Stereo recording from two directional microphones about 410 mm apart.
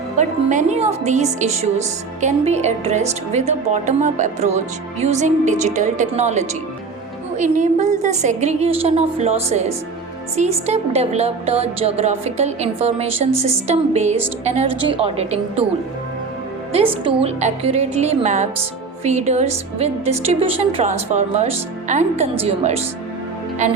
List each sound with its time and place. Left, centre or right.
0.2 s a woman's voice: centre
16.7 s a woman's voice: centre